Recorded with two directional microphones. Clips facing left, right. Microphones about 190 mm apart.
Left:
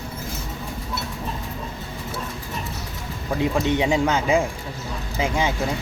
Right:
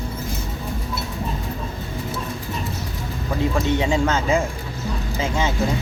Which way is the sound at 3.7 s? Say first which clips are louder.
Even; 15° left (ahead or behind).